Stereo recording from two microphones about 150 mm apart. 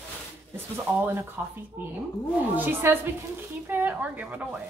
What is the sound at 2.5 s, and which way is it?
A woman's voice, 15° right (ahead or behind).